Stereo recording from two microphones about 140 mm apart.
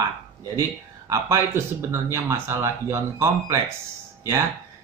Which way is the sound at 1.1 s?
20° right (ahead or behind).